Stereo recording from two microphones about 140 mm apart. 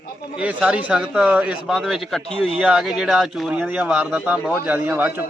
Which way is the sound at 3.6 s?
10° right (ahead or behind).